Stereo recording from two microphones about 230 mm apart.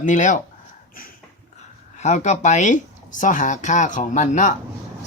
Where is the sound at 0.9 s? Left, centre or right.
Left.